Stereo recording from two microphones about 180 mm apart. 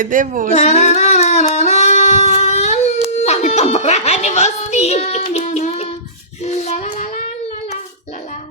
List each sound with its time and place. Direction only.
0.0 s speech: 50° right (ahead or behind)
0.5 s singing: 40° left (ahead or behind)
3.2 s music: 40° left (ahead or behind)
6.4 s child singing: 35° left (ahead or behind)